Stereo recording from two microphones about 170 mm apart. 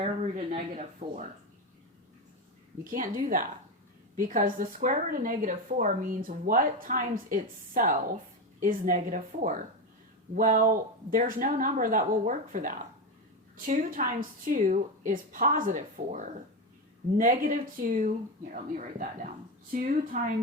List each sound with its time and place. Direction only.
0.0 s speech: 45° right (ahead or behind)
2.8 s a woman's voice: 55° right (ahead or behind)